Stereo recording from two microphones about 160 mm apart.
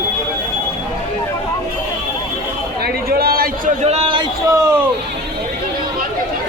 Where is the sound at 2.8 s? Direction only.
70° right (ahead or behind).